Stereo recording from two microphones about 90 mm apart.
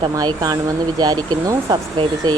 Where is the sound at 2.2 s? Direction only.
50° right (ahead or behind).